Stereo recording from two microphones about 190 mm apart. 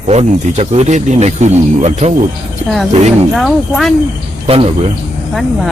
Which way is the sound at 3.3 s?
Centre (ahead or behind).